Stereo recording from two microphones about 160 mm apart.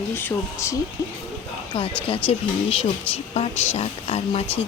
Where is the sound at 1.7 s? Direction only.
35° left (ahead or behind).